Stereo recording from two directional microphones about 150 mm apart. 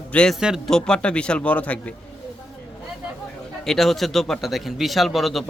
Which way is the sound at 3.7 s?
Centre (ahead or behind).